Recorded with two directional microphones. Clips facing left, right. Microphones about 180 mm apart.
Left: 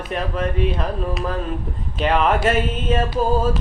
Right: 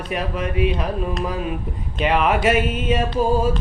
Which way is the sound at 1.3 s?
10° right (ahead or behind).